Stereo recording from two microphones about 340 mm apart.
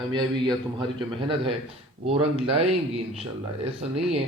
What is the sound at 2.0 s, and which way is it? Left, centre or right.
Speech, centre.